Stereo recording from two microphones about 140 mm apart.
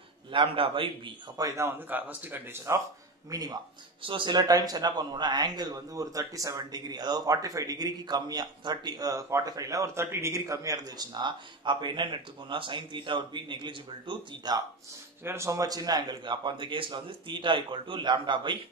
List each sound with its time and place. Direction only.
0.3 s a man's voice: 40° right (ahead or behind)
1.4 s speech: 20° right (ahead or behind)
15.2 s a man's voice: 20° right (ahead or behind); by 18.6 s 35° right (ahead or behind)